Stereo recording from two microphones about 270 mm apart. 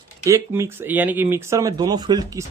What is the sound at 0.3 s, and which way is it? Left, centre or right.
Speech, centre.